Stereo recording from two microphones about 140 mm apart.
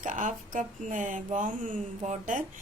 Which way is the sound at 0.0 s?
65° right (ahead or behind).